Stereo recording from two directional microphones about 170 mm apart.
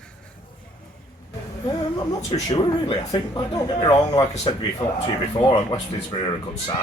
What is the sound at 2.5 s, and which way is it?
Speech, 25° left (ahead or behind).